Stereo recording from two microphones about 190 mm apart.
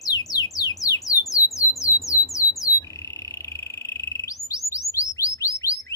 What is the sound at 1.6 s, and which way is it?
Squawk, 15° left (ahead or behind).